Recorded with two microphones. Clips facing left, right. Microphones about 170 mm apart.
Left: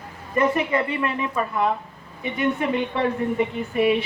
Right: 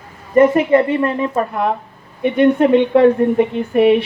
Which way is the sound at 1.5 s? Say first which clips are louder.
Right 4 dB; 65° right (ahead or behind).